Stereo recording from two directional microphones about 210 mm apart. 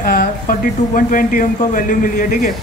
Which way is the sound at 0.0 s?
40° left (ahead or behind).